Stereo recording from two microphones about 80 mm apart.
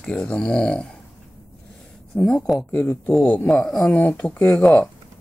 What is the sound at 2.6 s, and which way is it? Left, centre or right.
Speech, left.